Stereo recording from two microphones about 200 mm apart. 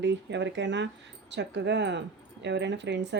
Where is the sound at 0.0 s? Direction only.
60° right (ahead or behind).